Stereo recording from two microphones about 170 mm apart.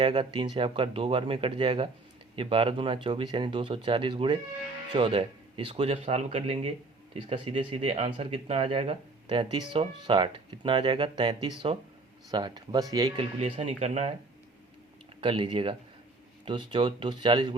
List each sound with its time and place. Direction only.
0.0 s speech: 25° right (ahead or behind)
13.7 s speech: 40° right (ahead or behind)
15.2 s speech: 30° right (ahead or behind)